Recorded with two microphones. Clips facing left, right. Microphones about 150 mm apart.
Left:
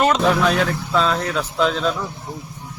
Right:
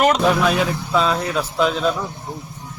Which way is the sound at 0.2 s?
5° right (ahead or behind).